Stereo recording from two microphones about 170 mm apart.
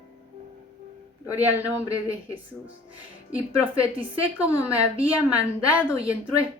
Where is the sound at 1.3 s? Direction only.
10° right (ahead or behind).